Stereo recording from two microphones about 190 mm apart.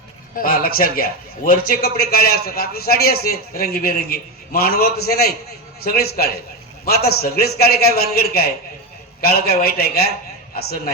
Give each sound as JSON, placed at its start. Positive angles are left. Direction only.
{"t": 0.3, "sound": "a man's voice", "side_deg": 50}